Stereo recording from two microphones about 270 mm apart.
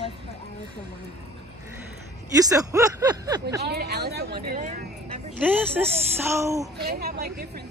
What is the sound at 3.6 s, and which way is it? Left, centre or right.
A woman's voice, right.